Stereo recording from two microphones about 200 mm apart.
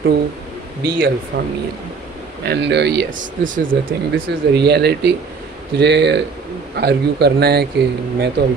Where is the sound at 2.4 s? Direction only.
55° right (ahead or behind).